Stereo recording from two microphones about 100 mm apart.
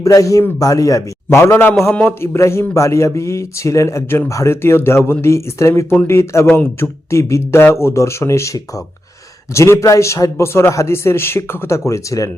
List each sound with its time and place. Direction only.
0.0 s a man's voice: 35° left (ahead or behind)